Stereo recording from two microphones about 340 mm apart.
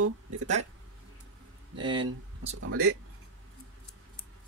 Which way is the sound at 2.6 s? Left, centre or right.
Right.